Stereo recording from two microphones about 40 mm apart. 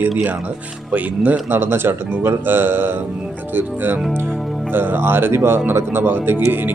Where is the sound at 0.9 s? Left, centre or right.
Right.